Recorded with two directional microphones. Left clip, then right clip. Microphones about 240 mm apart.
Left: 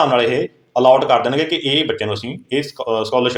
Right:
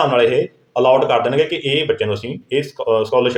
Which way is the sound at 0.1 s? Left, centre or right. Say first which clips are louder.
Right 1 dB; left.